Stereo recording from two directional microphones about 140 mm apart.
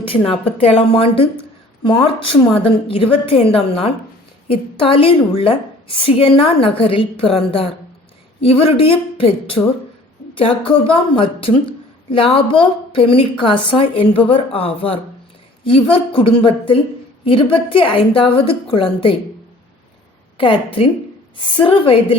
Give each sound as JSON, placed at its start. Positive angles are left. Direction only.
{"t": 0.0, "sound": "a woman's voice", "side_deg": 40}
{"t": 20.4, "sound": "a woman's voice", "side_deg": 40}